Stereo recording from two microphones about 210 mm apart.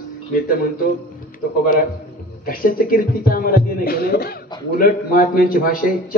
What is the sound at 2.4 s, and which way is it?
A man's voice, 45° left (ahead or behind).